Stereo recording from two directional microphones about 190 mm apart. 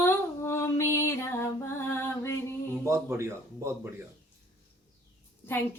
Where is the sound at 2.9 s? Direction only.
15° right (ahead or behind).